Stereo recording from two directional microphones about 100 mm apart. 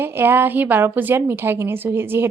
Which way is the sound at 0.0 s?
20° right (ahead or behind).